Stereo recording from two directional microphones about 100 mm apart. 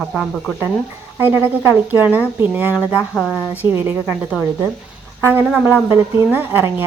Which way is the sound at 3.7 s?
25° right (ahead or behind).